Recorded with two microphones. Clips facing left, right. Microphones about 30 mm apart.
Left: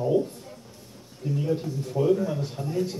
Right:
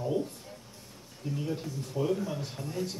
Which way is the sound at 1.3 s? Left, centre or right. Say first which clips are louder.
Left 7 dB; centre.